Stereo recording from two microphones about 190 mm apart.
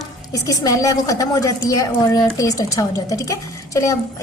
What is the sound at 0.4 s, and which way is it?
A woman's voice, 20° left (ahead or behind).